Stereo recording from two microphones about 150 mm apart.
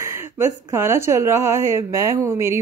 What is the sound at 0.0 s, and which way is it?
Speech, 15° right (ahead or behind).